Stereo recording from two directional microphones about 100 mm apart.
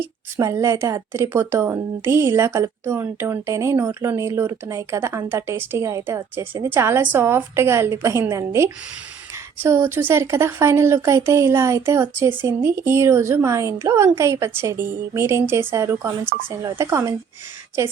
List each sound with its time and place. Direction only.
0.3 s a woman's voice: 30° right (ahead or behind)
6.3 s a woman's voice: 20° right (ahead or behind)